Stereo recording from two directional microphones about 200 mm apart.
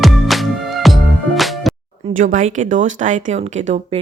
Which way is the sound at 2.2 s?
40° right (ahead or behind).